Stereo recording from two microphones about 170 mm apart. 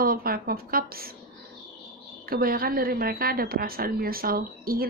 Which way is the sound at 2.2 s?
60° right (ahead or behind).